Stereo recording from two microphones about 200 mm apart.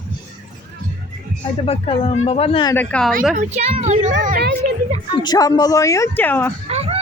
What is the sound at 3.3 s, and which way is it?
A woman's voice, 35° right (ahead or behind).